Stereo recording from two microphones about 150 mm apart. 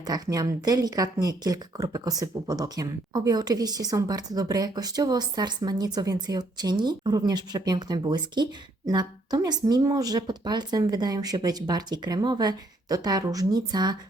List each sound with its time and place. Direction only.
0.0 s a woman's voice: 25° right (ahead or behind)